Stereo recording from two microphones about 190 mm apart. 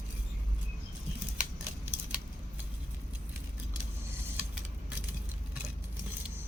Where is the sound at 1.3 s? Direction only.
5° right (ahead or behind).